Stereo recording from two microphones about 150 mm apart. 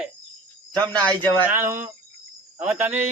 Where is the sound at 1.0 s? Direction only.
10° left (ahead or behind).